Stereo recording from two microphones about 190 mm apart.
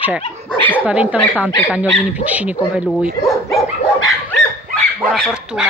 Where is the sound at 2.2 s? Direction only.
10° right (ahead or behind).